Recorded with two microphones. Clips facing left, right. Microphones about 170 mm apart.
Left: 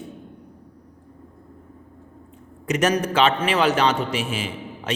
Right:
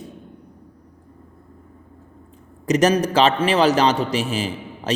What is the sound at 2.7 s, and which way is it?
A man's voice, 35° right (ahead or behind).